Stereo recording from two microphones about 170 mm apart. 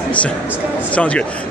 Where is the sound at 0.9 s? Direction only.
5° left (ahead or behind).